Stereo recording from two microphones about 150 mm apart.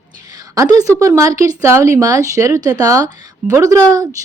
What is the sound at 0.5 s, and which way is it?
Speech, 25° right (ahead or behind).